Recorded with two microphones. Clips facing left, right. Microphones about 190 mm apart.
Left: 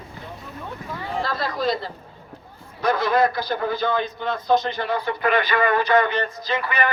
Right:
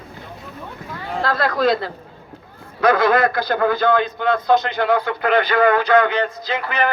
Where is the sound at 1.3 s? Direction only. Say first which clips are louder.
Right 6 dB; 60° right (ahead or behind).